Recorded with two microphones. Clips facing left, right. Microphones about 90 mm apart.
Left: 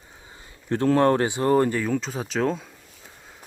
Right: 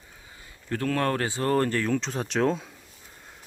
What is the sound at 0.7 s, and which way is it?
Speech, 25° left (ahead or behind).